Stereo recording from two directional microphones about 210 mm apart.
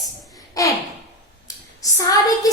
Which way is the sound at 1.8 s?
15° left (ahead or behind).